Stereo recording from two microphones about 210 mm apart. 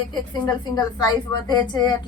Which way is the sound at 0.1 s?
20° left (ahead or behind).